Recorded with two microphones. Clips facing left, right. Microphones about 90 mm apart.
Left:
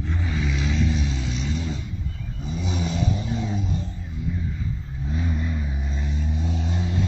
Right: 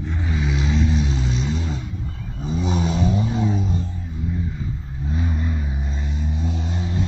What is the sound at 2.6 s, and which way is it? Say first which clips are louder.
Vehicle: right 4 dB; 55° right (ahead or behind).